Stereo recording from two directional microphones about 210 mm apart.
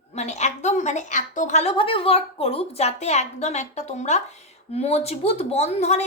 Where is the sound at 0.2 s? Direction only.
30° left (ahead or behind).